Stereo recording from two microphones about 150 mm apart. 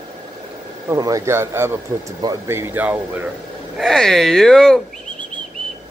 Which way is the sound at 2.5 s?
15° right (ahead or behind).